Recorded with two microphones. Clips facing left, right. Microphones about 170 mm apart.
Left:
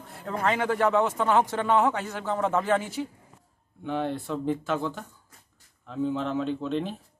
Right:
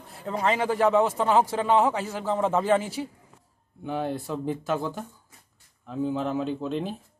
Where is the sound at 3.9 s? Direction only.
10° right (ahead or behind).